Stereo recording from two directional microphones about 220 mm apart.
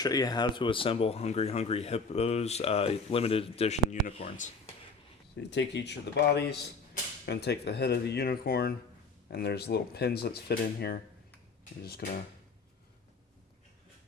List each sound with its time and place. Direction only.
0.0 s speech: 15° left (ahead or behind)
5.5 s speech: 50° left (ahead or behind)